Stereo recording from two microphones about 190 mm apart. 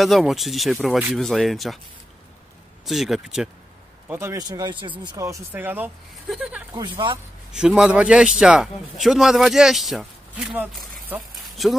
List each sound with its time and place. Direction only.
0.0 s speech: centre (ahead or behind)
2.8 s speech: centre (ahead or behind)
4.1 s speech: 15° right (ahead or behind)
6.7 s speech: 25° right (ahead or behind)
7.5 s speech: 5° right (ahead or behind)